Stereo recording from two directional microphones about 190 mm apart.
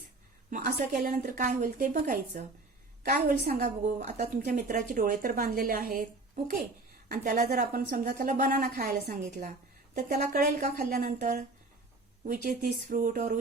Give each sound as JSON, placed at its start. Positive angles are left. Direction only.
{"t": 0.5, "sound": "a woman's voice", "side_deg": -45}